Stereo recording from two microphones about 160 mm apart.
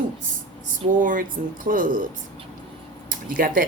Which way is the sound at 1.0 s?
55° right (ahead or behind).